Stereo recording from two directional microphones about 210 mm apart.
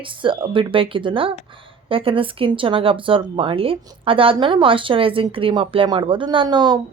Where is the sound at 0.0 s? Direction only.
25° right (ahead or behind).